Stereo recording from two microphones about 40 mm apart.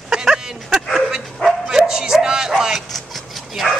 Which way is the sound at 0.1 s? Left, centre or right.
Centre.